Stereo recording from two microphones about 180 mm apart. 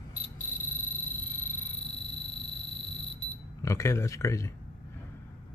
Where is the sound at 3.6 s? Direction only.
15° left (ahead or behind).